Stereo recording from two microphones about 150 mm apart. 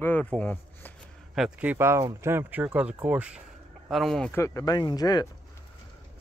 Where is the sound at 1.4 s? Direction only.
10° right (ahead or behind).